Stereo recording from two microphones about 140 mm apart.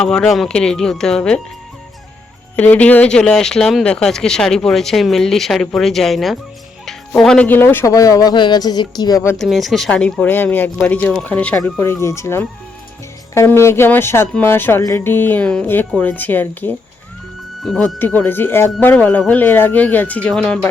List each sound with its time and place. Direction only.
0.0 s speech: 5° left (ahead or behind)
2.6 s speech: 10° left (ahead or behind); by 9.3 s 25° left (ahead or behind)
9.4 s speech: centre (ahead or behind)